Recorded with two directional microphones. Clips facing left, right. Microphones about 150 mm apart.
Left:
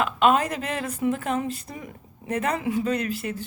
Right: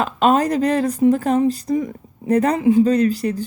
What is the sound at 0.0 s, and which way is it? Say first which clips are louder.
Speech: right 4 dB; 35° right (ahead or behind).